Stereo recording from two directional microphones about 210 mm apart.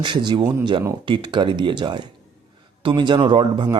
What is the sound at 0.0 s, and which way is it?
Speech, 20° right (ahead or behind).